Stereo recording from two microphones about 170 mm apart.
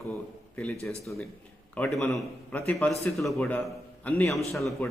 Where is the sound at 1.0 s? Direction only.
Centre (ahead or behind).